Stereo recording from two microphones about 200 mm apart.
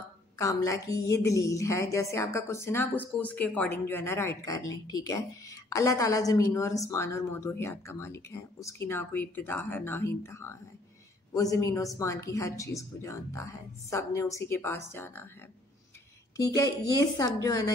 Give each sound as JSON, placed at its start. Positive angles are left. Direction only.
{"t": 0.4, "sound": "a woman's voice", "side_deg": 15}
{"t": 16.3, "sound": "a woman's voice", "side_deg": 15}